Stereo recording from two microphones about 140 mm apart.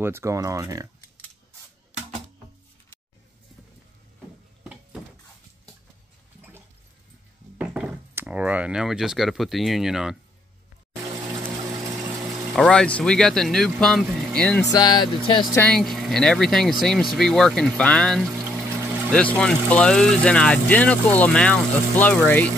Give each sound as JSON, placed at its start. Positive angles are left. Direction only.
{"t": 0.0, "sound": "speech", "side_deg": -20}
{"t": 7.5, "sound": "speech", "side_deg": -10}
{"t": 11.1, "sound": "water", "side_deg": -25}
{"t": 12.5, "sound": "speech", "side_deg": 5}
{"t": 14.7, "sound": "speech", "side_deg": 30}
{"t": 15.7, "sound": "speech", "side_deg": 0}